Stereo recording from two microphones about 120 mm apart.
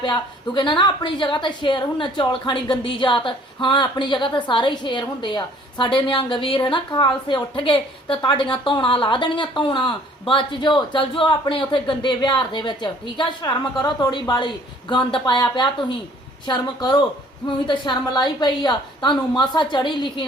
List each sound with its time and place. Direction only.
0.0 s a woman's voice: 40° left (ahead or behind)